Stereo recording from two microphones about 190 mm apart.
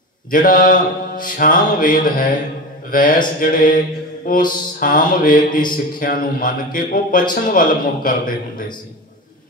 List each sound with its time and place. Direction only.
0.3 s mantra: 45° left (ahead or behind)
2.9 s a man's voice: 45° left (ahead or behind)
3.3 s mantra: 45° left (ahead or behind)